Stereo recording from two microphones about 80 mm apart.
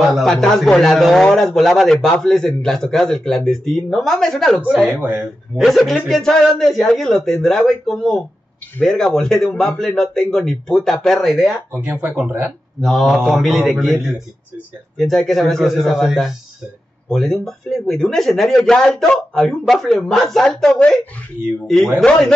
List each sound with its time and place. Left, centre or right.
0.0 s a sound: centre
0.3 s a man's voice: centre
4.8 s speech: right
5.6 s a man's voice: centre
11.7 s speech: right
12.8 s a man's voice: centre
22.0 s a man's voice: centre